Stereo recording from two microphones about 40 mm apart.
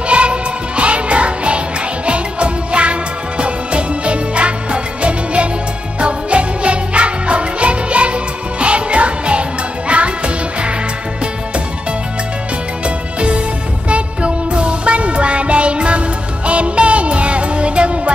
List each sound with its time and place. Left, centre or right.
0.1 s music: right
12.8 s music: right